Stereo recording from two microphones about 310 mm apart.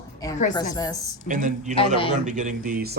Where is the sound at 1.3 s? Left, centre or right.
Right.